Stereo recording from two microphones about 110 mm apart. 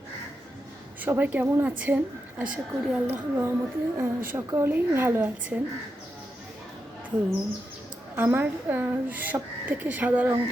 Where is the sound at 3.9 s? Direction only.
20° right (ahead or behind).